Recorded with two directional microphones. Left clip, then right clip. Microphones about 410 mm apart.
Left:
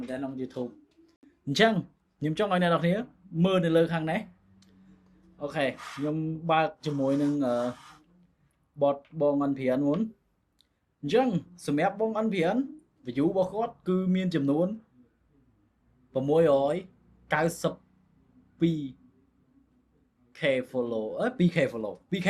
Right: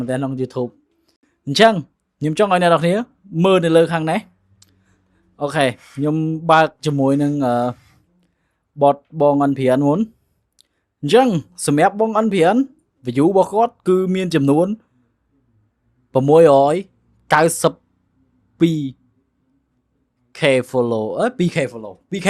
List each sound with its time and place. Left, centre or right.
0.1 s speech: right
0.4 s speech: right
1.5 s speech: right
8.8 s speech: right
16.1 s a man's voice: right
20.3 s speech: right
21.7 s a man's voice: centre